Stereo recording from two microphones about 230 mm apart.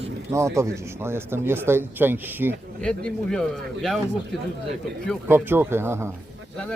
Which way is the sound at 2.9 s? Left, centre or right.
Centre.